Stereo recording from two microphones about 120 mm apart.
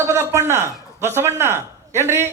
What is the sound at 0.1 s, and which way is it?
A man's voice, 20° right (ahead or behind).